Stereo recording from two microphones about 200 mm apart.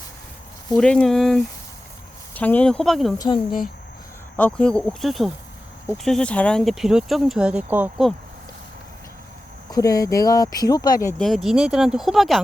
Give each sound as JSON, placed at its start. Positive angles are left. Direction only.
{"t": 0.7, "sound": "speech", "side_deg": 5}
{"t": 3.2, "sound": "speech", "side_deg": 20}
{"t": 4.4, "sound": "speech", "side_deg": 5}
{"t": 9.7, "sound": "speech", "side_deg": 15}
{"t": 11.2, "sound": "speech", "side_deg": 0}